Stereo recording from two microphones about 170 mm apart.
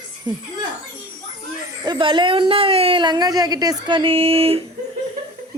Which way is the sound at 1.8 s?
30° right (ahead or behind).